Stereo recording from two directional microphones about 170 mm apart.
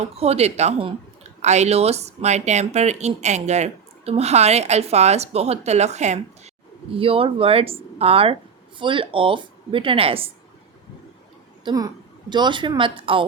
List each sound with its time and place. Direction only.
0.2 s speech: 35° right (ahead or behind)
11.6 s speech: 20° right (ahead or behind)